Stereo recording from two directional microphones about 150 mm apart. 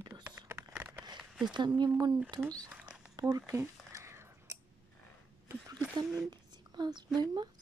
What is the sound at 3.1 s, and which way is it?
Scissors, 25° right (ahead or behind).